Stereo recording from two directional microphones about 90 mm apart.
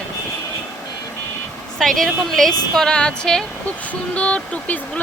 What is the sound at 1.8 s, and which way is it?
A woman's voice, 5° left (ahead or behind).